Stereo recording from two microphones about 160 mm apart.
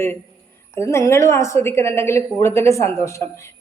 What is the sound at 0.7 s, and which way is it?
A woman's voice, 15° left (ahead or behind).